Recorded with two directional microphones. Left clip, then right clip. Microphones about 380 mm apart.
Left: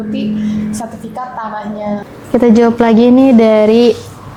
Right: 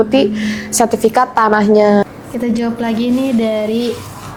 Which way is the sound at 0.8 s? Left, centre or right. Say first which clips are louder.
Right 12 dB; right.